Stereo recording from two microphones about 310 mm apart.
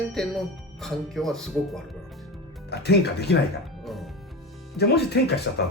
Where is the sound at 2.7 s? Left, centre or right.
Left.